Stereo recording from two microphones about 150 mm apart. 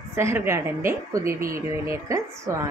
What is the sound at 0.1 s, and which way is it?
A woman's voice, 15° right (ahead or behind).